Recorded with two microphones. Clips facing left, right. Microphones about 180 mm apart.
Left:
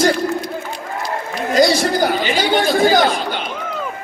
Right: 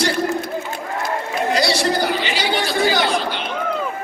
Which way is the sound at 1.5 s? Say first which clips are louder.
Left 5 dB; 50° left (ahead or behind).